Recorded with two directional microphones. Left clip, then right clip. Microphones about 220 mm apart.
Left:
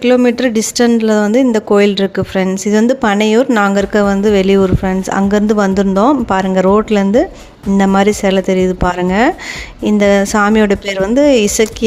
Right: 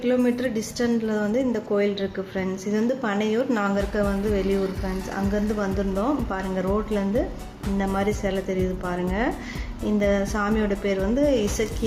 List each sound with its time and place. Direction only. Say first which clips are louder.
0.0 s speech: left 12 dB; 40° left (ahead or behind)